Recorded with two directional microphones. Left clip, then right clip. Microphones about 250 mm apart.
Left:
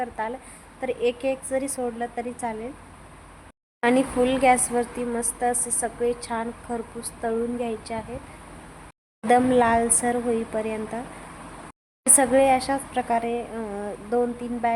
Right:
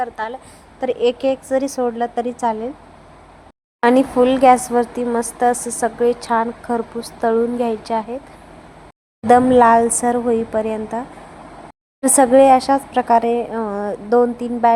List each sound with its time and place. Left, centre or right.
0.0 s a woman's voice: centre
3.8 s a woman's voice: centre
9.2 s a woman's voice: centre
12.0 s a woman's voice: centre